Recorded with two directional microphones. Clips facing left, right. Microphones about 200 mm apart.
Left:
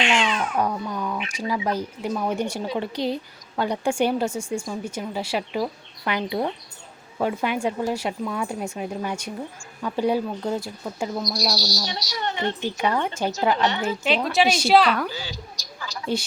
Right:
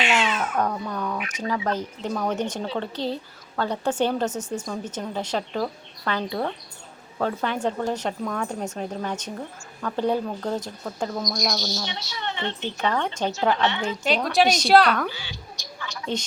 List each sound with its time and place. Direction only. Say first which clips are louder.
0.0 s babbling: left 1 dB; 5° right (ahead or behind)
0.5 s speech: left 1 dB; 10° left (ahead or behind)
11.3 s a woman's voice: left 1 dB; 35° left (ahead or behind)
12.5 s a woman's voice: left 2 dB; 10° left (ahead or behind)
15.1 s a sound: left 5 dB; 40° left (ahead or behind)